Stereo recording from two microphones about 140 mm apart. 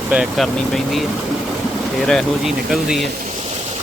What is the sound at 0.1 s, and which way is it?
Speech, 5° right (ahead or behind).